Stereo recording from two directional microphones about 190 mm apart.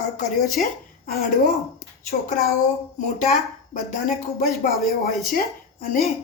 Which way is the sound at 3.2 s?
40° left (ahead or behind).